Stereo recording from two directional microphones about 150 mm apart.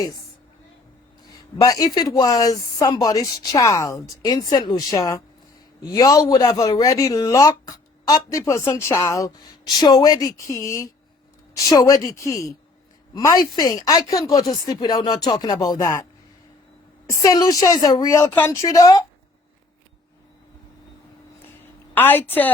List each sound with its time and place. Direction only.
1.3 s a woman's voice: 25° left (ahead or behind)
17.1 s a woman's voice: 20° left (ahead or behind)
21.3 s a sound: 15° left (ahead or behind)